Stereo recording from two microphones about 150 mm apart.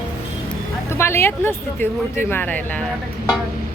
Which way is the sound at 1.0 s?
15° left (ahead or behind).